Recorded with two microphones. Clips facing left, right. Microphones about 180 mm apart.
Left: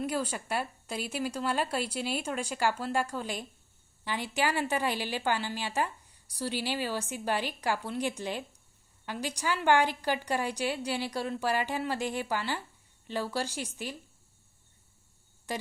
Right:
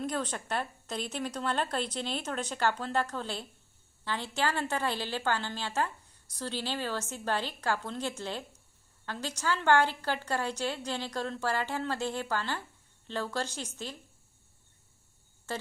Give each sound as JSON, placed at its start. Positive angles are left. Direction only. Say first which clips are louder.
{"t": 0.0, "sound": "a woman's voice", "louder": "left 2 dB", "side_deg": 10}
{"t": 15.5, "sound": "speech", "louder": "left 1 dB", "side_deg": 15}